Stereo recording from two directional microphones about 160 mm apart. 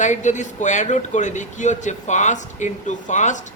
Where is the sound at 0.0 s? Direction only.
50° left (ahead or behind).